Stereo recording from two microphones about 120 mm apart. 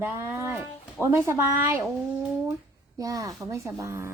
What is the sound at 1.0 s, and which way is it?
Speech, 20° right (ahead or behind).